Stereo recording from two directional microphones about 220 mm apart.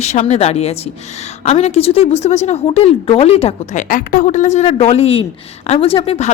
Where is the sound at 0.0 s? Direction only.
30° left (ahead or behind).